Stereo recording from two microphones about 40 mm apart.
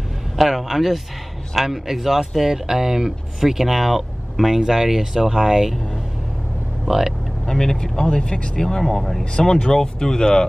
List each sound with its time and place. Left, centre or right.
0.4 s speech: centre
6.9 s speech: centre
7.4 s speech: centre
9.2 s speech: centre